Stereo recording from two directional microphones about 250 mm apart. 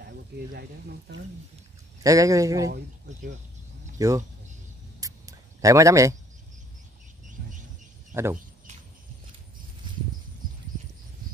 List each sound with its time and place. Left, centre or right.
0.0 s speech: right
2.0 s speech: centre
4.0 s speech: centre
5.0 s a sound: centre
7.4 s a sound: right
8.1 s speech: centre